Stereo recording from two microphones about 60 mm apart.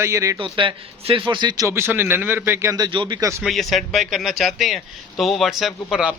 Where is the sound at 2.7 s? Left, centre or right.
Right.